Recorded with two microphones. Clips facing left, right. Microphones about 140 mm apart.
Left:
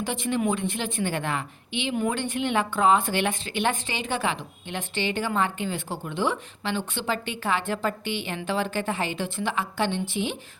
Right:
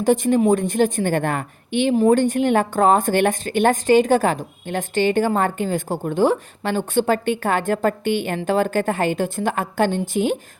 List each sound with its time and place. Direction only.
0.0 s a woman's voice: 45° right (ahead or behind)